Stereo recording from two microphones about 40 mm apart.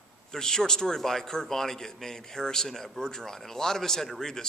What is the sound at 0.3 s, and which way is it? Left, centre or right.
A man's voice, centre.